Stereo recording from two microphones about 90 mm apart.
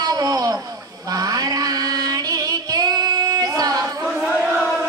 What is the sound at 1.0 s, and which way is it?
Music, 40° right (ahead or behind).